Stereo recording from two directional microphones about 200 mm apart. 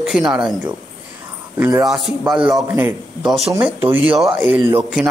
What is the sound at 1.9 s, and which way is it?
Speech, centre (ahead or behind).